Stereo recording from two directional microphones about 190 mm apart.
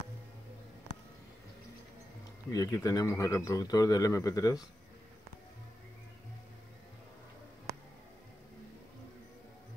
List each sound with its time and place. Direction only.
2.5 s speech: 20° left (ahead or behind)
7.7 s music: 15° right (ahead or behind)